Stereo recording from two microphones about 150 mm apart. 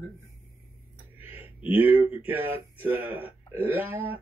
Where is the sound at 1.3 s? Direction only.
40° left (ahead or behind).